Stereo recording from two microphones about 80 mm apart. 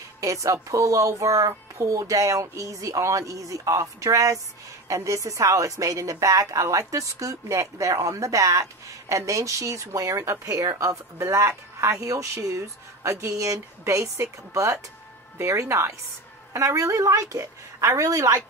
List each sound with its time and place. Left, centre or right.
0.2 s speech: right